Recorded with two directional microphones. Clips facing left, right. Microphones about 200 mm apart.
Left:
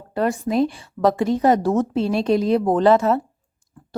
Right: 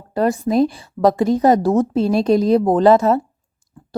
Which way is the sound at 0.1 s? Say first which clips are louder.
Right 4 dB; 40° right (ahead or behind).